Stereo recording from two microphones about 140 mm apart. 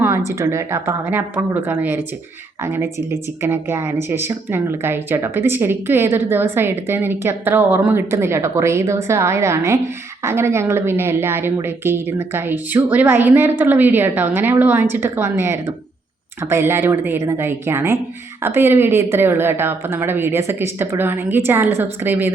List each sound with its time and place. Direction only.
0.3 s speech: 20° right (ahead or behind)